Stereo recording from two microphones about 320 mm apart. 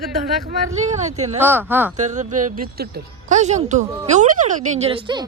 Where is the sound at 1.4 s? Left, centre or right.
Centre.